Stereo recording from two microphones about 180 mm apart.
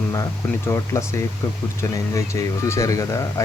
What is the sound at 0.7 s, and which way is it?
Speech, 15° left (ahead or behind).